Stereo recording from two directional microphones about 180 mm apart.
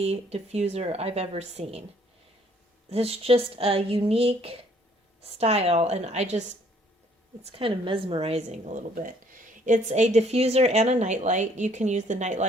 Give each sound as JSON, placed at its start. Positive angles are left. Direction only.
{"t": 0.0, "sound": "a woman's voice", "side_deg": -35}
{"t": 2.9, "sound": "a woman's voice", "side_deg": -35}
{"t": 7.4, "sound": "a woman's voice", "side_deg": -30}